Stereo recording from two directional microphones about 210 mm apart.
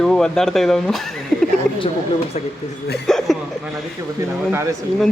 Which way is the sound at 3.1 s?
Centre (ahead or behind).